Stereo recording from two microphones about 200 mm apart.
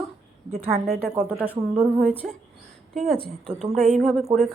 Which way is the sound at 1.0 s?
Centre (ahead or behind).